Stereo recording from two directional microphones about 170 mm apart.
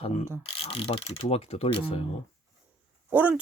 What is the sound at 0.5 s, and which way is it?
Speech, 35° left (ahead or behind).